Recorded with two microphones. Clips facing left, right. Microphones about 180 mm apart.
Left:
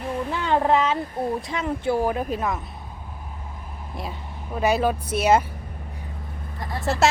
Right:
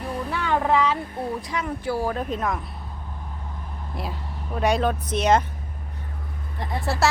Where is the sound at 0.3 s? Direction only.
25° left (ahead or behind).